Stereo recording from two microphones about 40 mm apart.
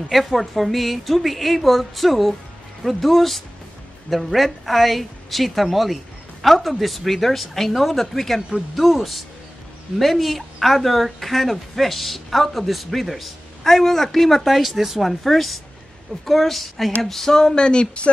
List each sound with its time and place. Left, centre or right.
0.1 s a man's voice: centre
8.4 s speech: centre
8.7 s a man's voice: centre
17.0 s a sound: centre; by 18.1 s left